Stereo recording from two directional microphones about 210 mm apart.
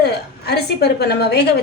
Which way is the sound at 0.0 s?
50° left (ahead or behind).